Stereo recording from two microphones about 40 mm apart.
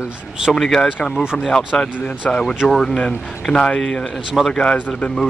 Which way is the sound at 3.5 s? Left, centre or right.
Left.